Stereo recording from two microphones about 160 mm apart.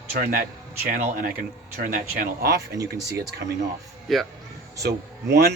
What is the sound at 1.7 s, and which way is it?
Speech, 65° right (ahead or behind).